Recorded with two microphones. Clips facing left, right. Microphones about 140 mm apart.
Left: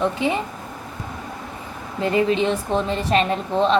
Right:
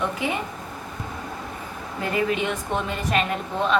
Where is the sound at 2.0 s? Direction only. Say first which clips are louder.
Left 5 dB; 25° left (ahead or behind).